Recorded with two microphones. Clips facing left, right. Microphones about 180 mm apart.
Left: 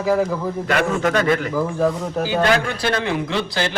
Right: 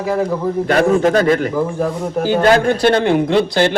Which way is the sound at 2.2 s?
55° right (ahead or behind).